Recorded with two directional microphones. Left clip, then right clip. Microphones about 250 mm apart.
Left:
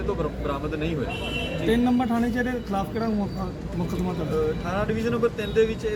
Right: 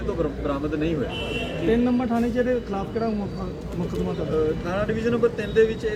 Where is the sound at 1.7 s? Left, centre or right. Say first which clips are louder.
Even; left.